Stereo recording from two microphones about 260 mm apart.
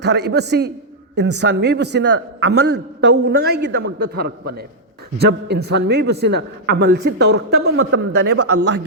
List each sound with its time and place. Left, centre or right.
0.0 s a man's voice: right